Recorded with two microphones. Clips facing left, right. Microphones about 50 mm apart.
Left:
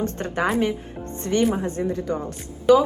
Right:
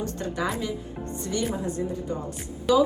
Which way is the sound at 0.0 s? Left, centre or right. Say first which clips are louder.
Left 5 dB; left.